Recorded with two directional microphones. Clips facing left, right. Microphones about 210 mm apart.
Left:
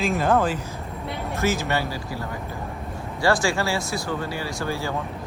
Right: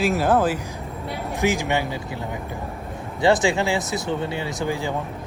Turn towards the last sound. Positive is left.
turn(degrees=-15)  # may be behind; listen again after turning